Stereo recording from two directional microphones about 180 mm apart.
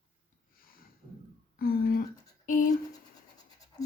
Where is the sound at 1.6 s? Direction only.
55° left (ahead or behind).